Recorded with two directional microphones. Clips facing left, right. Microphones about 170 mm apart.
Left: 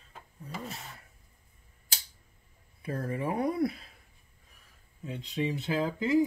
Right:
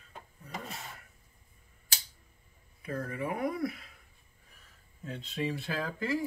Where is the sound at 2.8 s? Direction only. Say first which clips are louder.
Left 2 dB; 30° left (ahead or behind).